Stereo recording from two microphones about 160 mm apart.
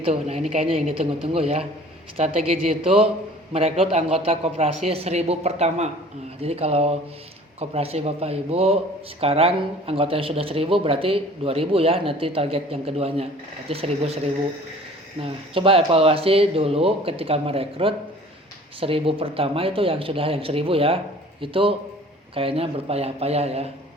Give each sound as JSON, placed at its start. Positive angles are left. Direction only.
{"t": 0.0, "sound": "speech", "side_deg": -40}
{"t": 15.2, "sound": "speech", "side_deg": -35}